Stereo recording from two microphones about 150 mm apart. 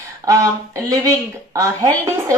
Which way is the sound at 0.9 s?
25° right (ahead or behind).